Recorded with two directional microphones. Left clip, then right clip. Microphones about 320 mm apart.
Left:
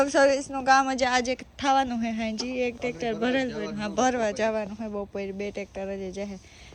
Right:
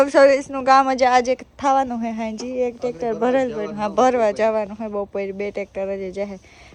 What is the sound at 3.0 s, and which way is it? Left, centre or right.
Speech, centre.